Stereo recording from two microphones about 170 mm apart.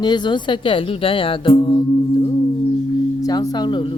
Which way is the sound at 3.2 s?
20° left (ahead or behind).